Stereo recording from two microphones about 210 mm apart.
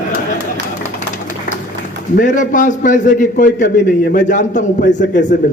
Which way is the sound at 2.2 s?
40° left (ahead or behind).